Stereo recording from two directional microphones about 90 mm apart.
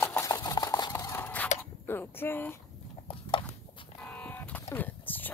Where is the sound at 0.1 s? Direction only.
35° left (ahead or behind).